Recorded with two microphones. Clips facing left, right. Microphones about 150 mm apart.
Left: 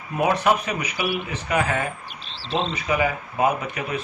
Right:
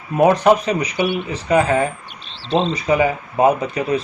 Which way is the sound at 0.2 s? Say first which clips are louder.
Right 7 dB; 40° right (ahead or behind).